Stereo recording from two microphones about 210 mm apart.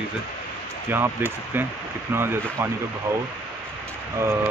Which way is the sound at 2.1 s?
10° right (ahead or behind).